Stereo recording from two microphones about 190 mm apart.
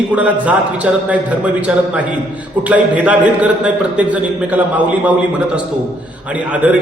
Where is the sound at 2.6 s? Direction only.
5° right (ahead or behind).